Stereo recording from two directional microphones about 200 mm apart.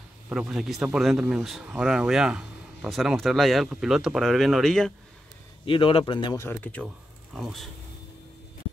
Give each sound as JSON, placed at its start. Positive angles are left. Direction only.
{"t": 0.3, "sound": "speech", "side_deg": 0}
{"t": 5.7, "sound": "a man's voice", "side_deg": 25}
{"t": 6.4, "sound": "speech", "side_deg": 10}